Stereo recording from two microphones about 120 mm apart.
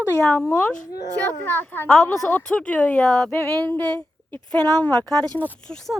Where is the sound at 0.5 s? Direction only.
10° left (ahead or behind).